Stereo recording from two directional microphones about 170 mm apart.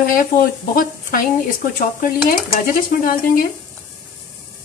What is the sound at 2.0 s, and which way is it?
Stir, 55° left (ahead or behind).